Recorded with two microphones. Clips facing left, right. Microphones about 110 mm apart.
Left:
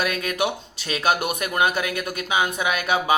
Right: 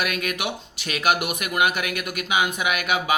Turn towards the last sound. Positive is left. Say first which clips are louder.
# left 2 dB
turn(degrees=30)  # may be behind; listen again after turning